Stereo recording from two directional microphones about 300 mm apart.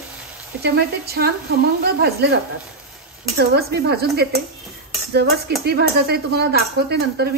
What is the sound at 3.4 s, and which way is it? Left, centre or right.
Speech, right.